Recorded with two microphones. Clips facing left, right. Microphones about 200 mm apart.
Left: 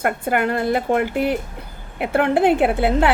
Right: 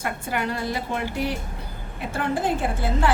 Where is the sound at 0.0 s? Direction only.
55° left (ahead or behind).